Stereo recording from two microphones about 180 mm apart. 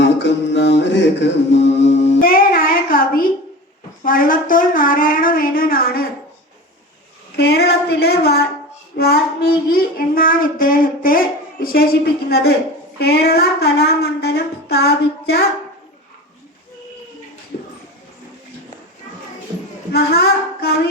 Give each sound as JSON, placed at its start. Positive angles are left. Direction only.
{"t": 0.0, "sound": "mantra", "side_deg": 80}
{"t": 2.2, "sound": "music", "side_deg": 55}
{"t": 4.0, "sound": "speech", "side_deg": 50}
{"t": 7.3, "sound": "a sound", "side_deg": 65}
{"t": 9.0, "sound": "a woman's voice", "side_deg": 60}
{"t": 19.9, "sound": "child singing", "side_deg": 60}